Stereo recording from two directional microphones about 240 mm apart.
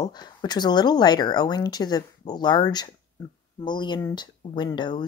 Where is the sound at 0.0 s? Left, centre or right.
Centre.